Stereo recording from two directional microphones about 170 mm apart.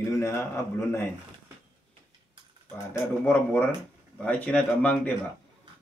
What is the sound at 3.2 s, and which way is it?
A man's voice, 10° left (ahead or behind).